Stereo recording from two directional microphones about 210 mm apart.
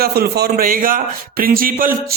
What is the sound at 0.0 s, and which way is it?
Speech, 50° right (ahead or behind).